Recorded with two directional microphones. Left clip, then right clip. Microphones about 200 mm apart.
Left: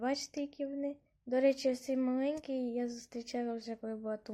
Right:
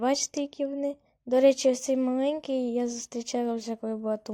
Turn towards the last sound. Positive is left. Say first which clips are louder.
# right 9 dB
turn(degrees=-30)  # may be behind; listen again after turning